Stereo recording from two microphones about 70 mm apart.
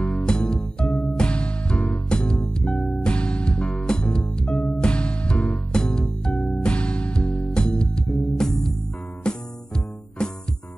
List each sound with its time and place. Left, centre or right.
0.0 s music: centre
6.3 s music: left